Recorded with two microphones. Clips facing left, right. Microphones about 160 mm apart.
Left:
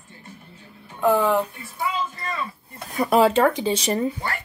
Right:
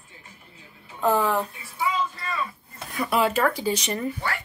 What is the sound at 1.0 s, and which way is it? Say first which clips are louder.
Speech: left 3 dB; 15° left (ahead or behind).